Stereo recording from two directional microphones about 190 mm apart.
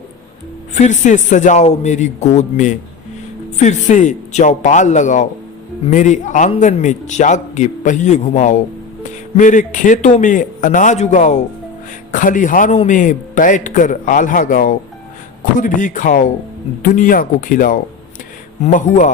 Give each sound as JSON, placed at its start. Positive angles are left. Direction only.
{"t": 0.7, "sound": "a man's voice", "side_deg": 40}